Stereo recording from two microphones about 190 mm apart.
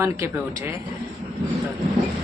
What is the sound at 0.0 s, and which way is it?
Speech, 15° right (ahead or behind).